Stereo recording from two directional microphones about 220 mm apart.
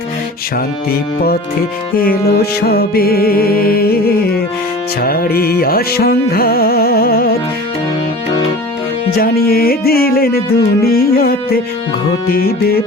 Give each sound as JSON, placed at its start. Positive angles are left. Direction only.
{"t": 0.9, "sound": "music", "side_deg": 45}
{"t": 9.1, "sound": "music", "side_deg": 45}